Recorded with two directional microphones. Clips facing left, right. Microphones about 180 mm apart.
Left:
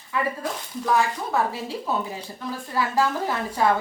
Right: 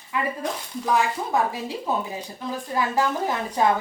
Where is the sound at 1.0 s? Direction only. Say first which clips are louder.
Right 1 dB; 15° right (ahead or behind).